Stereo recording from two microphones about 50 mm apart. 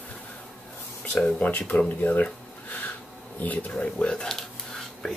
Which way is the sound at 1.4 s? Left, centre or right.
Left.